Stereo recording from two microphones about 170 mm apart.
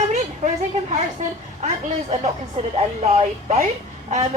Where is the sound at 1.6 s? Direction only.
40° right (ahead or behind).